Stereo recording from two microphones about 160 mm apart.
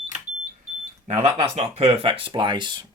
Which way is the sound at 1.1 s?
45° right (ahead or behind).